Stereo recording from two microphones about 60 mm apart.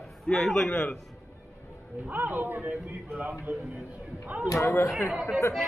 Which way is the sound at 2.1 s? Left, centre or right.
Right.